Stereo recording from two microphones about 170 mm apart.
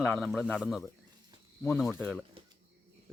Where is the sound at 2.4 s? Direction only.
30° right (ahead or behind).